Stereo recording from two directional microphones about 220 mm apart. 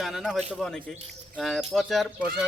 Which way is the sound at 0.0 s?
Centre (ahead or behind).